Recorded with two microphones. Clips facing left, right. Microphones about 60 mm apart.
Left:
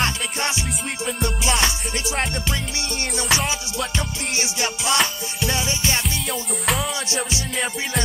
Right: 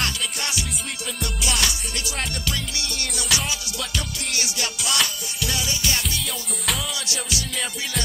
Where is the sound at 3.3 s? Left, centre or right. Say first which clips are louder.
Left 3 dB; left.